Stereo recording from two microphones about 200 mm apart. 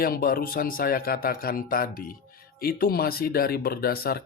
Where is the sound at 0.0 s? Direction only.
45° left (ahead or behind).